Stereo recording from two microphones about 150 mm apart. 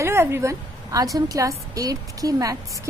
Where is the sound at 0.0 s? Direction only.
15° right (ahead or behind).